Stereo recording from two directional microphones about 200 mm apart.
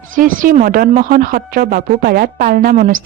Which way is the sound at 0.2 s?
40° right (ahead or behind).